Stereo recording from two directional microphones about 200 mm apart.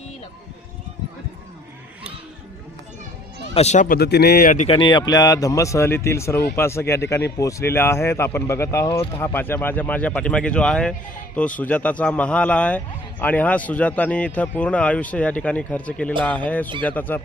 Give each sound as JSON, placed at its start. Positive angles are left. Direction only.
{"t": 3.5, "sound": "a man's voice", "side_deg": 35}